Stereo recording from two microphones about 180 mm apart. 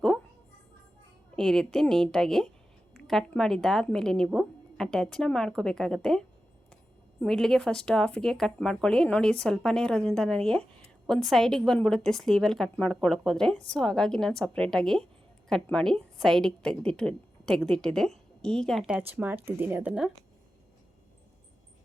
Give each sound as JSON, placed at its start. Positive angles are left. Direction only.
{"t": 1.4, "sound": "speech", "side_deg": 5}